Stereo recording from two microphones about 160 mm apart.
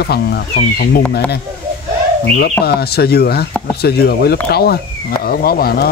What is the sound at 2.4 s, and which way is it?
Speech, 80° left.